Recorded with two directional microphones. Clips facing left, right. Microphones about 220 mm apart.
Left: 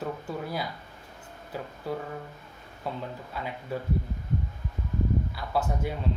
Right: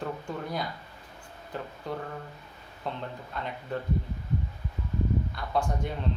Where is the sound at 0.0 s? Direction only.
5° left (ahead or behind).